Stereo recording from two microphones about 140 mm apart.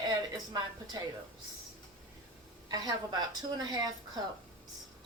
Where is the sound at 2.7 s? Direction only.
25° right (ahead or behind).